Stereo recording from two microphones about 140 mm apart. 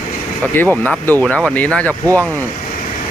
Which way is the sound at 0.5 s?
15° left (ahead or behind).